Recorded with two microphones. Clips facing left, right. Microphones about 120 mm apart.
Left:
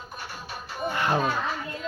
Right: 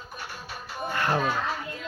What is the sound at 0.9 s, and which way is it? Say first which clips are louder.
Music: left 1 dB; 15° left (ahead or behind).